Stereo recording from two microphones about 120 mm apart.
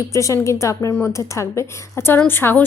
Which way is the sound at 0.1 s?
25° left (ahead or behind).